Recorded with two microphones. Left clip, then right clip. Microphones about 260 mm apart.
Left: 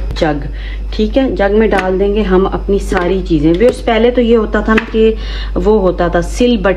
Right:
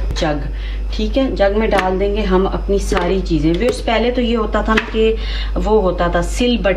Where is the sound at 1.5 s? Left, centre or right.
Centre.